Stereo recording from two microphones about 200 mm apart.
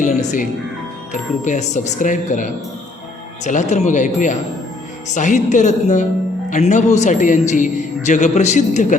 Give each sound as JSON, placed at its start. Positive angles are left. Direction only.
{"t": 0.2, "sound": "speech", "side_deg": 35}